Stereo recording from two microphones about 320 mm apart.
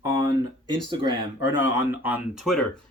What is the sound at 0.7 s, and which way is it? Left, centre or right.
A man's voice, centre.